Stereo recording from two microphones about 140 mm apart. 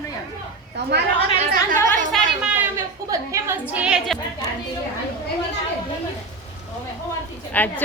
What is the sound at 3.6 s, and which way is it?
Speech, 10° right (ahead or behind).